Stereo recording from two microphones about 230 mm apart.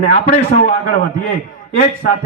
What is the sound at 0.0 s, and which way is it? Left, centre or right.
A man's voice, left.